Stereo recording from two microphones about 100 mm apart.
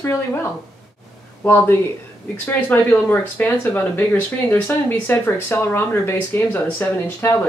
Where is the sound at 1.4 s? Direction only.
25° left (ahead or behind).